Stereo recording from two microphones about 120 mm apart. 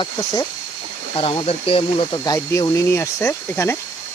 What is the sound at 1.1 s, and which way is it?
Speech, 50° left (ahead or behind).